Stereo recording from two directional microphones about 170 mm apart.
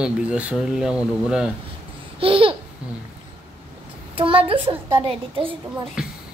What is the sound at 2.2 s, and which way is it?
Babbling, 30° right (ahead or behind).